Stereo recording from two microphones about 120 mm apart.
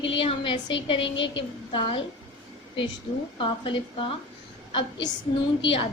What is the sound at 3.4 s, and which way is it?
A woman's voice, 45° left (ahead or behind).